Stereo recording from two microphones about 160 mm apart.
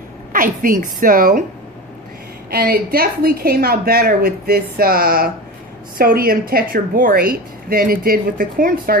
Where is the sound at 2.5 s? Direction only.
70° right (ahead or behind).